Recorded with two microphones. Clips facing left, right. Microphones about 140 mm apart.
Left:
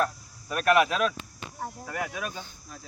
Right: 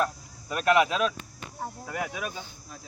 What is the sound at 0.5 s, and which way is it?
Speech, 20° right (ahead or behind).